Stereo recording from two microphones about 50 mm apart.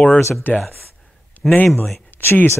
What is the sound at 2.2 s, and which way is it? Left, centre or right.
Speech, left.